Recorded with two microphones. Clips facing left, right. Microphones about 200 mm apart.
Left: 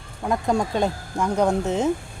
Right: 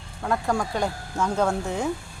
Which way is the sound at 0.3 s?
20° left (ahead or behind).